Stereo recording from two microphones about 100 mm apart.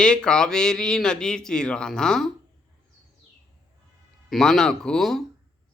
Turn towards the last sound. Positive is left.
turn(degrees=5)  # may be behind; listen again after turning